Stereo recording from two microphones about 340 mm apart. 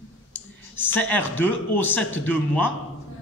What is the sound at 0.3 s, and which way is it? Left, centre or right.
A man's voice, centre.